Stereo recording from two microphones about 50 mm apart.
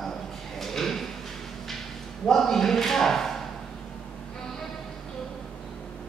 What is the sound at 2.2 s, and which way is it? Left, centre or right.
Speech, centre.